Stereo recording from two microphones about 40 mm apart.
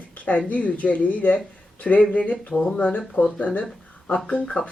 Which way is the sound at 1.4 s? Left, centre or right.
Left.